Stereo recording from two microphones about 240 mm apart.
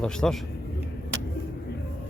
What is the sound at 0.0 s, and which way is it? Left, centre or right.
Speech, centre.